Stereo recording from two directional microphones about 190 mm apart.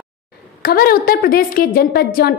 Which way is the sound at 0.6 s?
50° left (ahead or behind).